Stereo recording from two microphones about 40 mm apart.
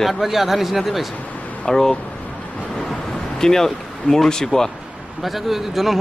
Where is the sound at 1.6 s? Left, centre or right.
Centre.